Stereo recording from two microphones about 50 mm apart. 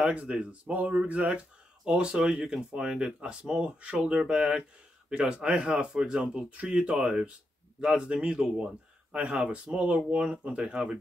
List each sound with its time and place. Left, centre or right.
0.0 s speech: right